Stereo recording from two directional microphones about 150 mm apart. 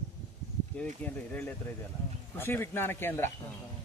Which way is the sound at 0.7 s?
10° left (ahead or behind).